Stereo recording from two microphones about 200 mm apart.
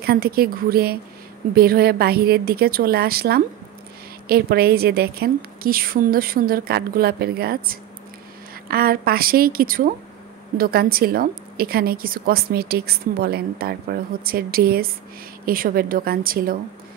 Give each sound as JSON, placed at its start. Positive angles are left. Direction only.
{"t": 0.0, "sound": "a woman's voice", "side_deg": -50}